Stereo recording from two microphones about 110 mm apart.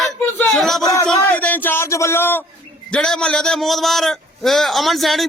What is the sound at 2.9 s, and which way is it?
A man's voice, 10° left (ahead or behind).